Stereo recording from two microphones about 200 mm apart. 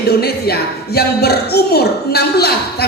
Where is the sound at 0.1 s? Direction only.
50° left (ahead or behind).